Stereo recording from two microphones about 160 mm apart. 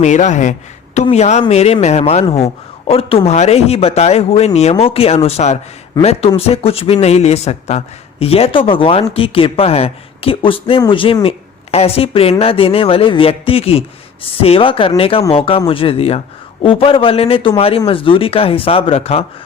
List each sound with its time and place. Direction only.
0.0 s speech: 45° left (ahead or behind)